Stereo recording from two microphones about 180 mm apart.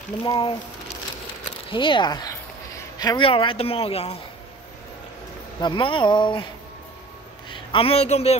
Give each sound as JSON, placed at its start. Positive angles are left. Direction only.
{"t": 0.2, "sound": "speech", "side_deg": 20}
{"t": 1.7, "sound": "a man's voice", "side_deg": 25}
{"t": 5.6, "sound": "speech", "side_deg": 25}
{"t": 7.4, "sound": "a man's voice", "side_deg": 30}